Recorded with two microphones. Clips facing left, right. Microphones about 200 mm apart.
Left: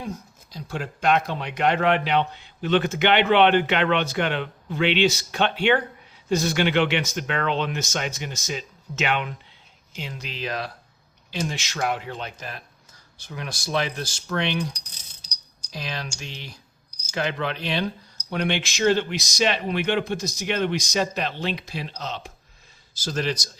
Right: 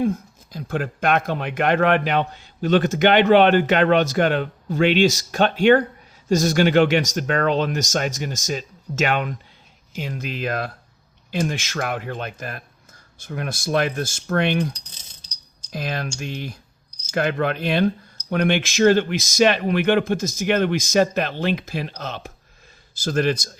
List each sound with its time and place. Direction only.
0.0 s a man's voice: 55° right (ahead or behind)
15.7 s a man's voice: 50° right (ahead or behind)